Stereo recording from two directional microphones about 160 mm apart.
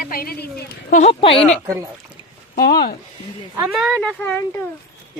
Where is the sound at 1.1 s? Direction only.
35° left (ahead or behind).